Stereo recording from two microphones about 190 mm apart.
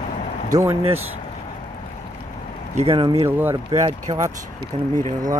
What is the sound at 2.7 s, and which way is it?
Speech, 30° right (ahead or behind).